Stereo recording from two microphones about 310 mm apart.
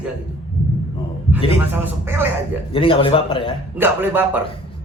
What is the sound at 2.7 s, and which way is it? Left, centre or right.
Speech, centre.